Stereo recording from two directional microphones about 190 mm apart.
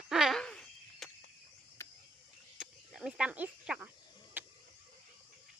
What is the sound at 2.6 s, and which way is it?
Snake, 5° right (ahead or behind).